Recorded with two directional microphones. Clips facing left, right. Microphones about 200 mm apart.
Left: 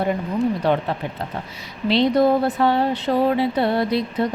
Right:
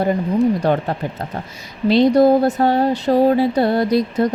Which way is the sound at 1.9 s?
45° right (ahead or behind).